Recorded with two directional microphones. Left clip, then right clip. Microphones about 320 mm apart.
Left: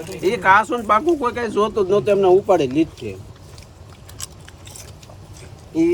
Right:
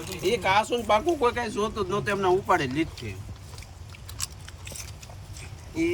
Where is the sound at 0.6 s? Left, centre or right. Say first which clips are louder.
Left 5 dB; left.